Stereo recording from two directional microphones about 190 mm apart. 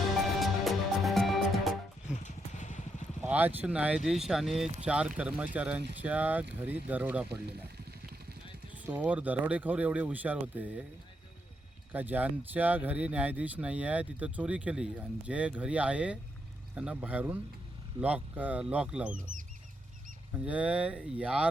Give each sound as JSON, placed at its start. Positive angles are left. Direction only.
{"t": 0.3, "sound": "music", "side_deg": 0}
{"t": 2.2, "sound": "vehicle", "side_deg": 40}
{"t": 3.2, "sound": "speech", "side_deg": -10}
{"t": 8.7, "sound": "speech", "side_deg": -10}
{"t": 11.9, "sound": "speech", "side_deg": -10}
{"t": 19.1, "sound": "speech", "side_deg": -45}
{"t": 20.3, "sound": "speech", "side_deg": -5}